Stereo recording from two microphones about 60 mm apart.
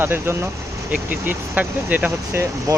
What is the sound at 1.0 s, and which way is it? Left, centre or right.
Speech, right.